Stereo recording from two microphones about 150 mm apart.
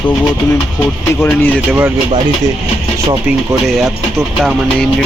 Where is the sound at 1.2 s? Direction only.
15° left (ahead or behind).